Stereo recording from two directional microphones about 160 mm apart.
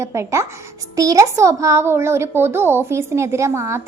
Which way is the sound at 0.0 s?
15° right (ahead or behind).